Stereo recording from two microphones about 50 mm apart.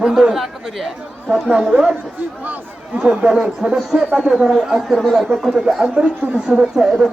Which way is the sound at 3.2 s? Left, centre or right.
Centre.